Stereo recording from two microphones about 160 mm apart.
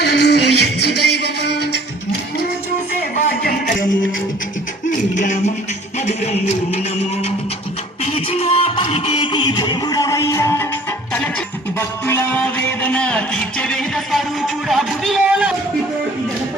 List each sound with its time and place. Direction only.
0.0 s music: 90° left
5.1 s music: 50° left (ahead or behind); by 10.7 s 20° left (ahead or behind)
11.8 s music: 15° left (ahead or behind); by 15.5 s 5° right (ahead or behind)